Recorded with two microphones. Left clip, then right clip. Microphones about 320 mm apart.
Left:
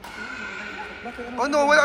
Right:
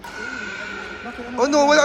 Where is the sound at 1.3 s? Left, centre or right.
Centre.